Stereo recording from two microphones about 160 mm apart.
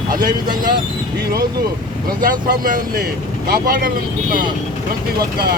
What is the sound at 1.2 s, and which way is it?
Speech, 70° right (ahead or behind).